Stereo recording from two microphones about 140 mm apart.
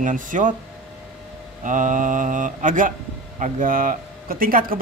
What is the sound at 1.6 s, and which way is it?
A man's voice, 65° right (ahead or behind).